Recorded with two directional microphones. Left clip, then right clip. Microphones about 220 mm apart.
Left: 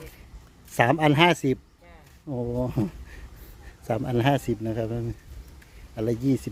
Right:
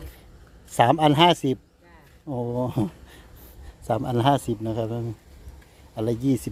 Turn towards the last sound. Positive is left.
turn(degrees=-15)  # may be behind; listen again after turning